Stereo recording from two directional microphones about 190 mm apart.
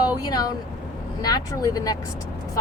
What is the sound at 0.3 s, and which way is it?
Speech, 20° left (ahead or behind).